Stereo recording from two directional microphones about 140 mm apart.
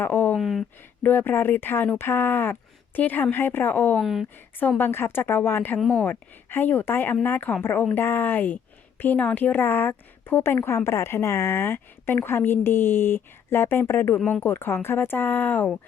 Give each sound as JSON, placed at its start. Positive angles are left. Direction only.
{"t": 0.0, "sound": "a sound", "side_deg": 15}
{"t": 0.3, "sound": "speech", "side_deg": 0}
{"t": 1.0, "sound": "a woman's voice", "side_deg": 15}
{"t": 4.0, "sound": "speech", "side_deg": 0}
{"t": 4.8, "sound": "a woman's voice", "side_deg": 15}
{"t": 14.2, "sound": "speech", "side_deg": 5}
{"t": 14.4, "sound": "a woman's voice", "side_deg": 15}